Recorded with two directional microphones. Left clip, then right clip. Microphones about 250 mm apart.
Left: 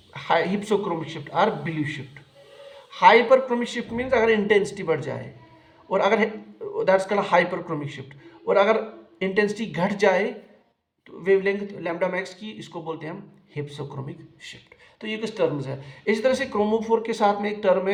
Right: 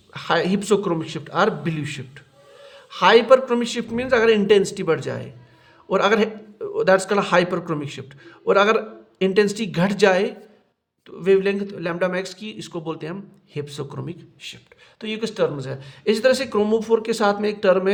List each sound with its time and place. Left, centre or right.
0.1 s a man's voice: right
15.0 s a man's voice: right